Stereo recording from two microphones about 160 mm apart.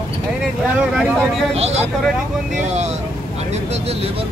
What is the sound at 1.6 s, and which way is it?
Speech, 40° right (ahead or behind).